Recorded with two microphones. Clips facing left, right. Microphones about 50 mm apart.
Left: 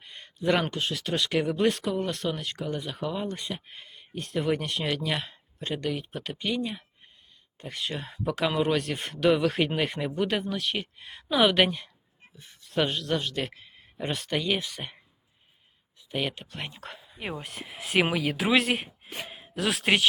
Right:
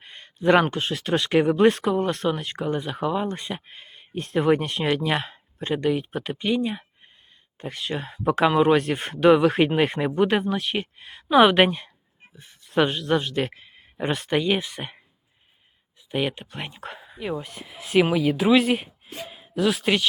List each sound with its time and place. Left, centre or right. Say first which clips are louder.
0.0 s a man's voice: right 6 dB; right
12.4 s a man's voice: right 6 dB; centre
16.1 s speech: right 5 dB; centre
17.5 s speech: right 5 dB; centre